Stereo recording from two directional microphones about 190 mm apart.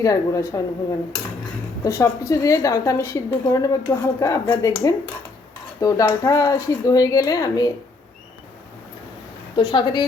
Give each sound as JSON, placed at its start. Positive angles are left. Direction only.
{"t": 0.0, "sound": "speech", "side_deg": 15}
{"t": 5.8, "sound": "speech", "side_deg": 15}
{"t": 9.6, "sound": "speech", "side_deg": 25}